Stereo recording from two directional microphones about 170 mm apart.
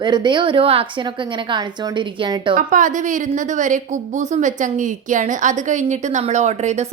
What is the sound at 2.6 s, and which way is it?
A woman's voice, 50° right (ahead or behind).